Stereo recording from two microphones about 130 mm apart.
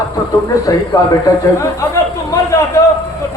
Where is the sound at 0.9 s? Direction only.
30° left (ahead or behind).